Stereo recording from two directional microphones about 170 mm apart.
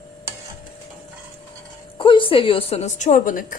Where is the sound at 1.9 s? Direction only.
30° left (ahead or behind); by 3.6 s 50° left (ahead or behind).